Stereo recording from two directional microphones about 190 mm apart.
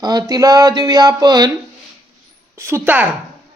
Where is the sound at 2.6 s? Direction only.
15° right (ahead or behind).